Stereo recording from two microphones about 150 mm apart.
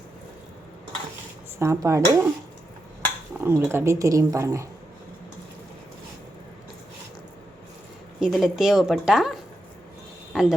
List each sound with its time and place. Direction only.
1.5 s speech: 20° right (ahead or behind)
3.4 s speech: 15° right (ahead or behind)
8.2 s a woman's voice: 5° right (ahead or behind)